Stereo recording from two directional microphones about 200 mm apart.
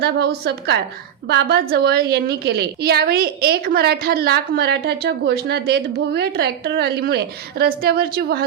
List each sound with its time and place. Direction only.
0.0 s a woman's voice: 50° right (ahead or behind)